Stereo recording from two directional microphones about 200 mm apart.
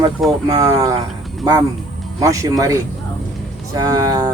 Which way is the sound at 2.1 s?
15° right (ahead or behind).